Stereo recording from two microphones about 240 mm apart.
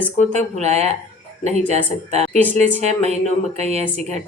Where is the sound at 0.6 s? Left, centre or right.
Right.